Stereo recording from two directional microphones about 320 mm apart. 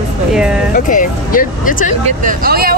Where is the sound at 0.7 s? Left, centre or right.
Left.